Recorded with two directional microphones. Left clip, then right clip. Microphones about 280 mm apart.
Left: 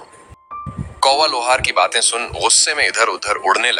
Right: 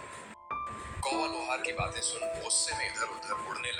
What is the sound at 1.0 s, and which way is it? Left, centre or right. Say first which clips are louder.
Speech: left 19 dB; left.